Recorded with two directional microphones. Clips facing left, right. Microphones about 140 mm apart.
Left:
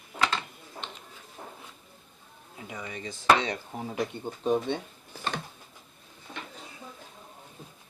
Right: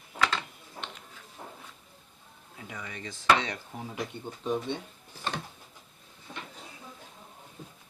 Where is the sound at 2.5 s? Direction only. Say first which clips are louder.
Left 3 dB; 20° left (ahead or behind).